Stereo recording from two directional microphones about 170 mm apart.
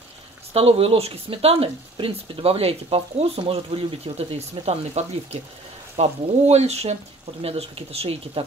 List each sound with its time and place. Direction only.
0.5 s speech: 35° right (ahead or behind)